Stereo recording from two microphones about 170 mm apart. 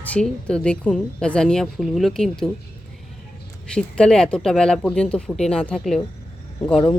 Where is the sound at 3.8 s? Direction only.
5° left (ahead or behind).